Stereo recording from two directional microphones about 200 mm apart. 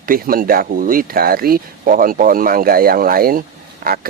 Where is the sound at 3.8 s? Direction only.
45° right (ahead or behind).